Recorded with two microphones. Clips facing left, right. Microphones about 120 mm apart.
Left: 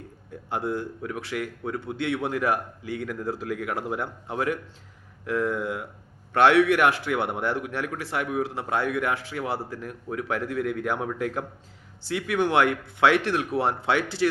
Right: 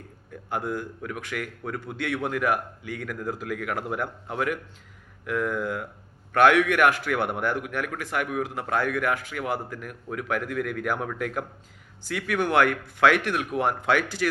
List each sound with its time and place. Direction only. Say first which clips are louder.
0.5 s a man's voice: left 1 dB; 30° left (ahead or behind)